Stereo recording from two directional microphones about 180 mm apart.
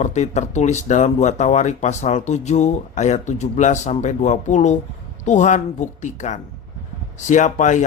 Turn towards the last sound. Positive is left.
turn(degrees=40)  # may be behind; listen again after turning